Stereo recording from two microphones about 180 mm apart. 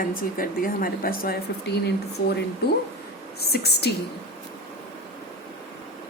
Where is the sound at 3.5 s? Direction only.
65° left (ahead or behind).